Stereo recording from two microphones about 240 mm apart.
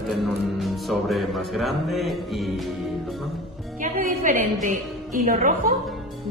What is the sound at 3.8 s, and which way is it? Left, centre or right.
Music, right.